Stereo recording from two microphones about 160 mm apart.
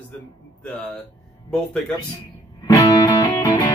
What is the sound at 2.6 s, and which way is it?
Music, 20° left (ahead or behind).